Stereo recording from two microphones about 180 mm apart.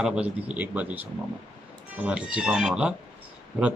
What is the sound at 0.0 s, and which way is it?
A man's voice, 5° right (ahead or behind).